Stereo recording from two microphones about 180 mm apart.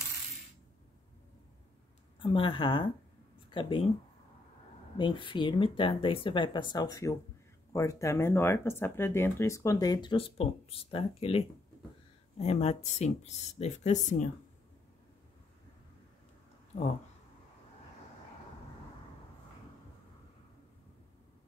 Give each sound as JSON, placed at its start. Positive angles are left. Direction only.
{"t": 2.2, "sound": "speech", "side_deg": 25}
{"t": 4.9, "sound": "speech", "side_deg": 25}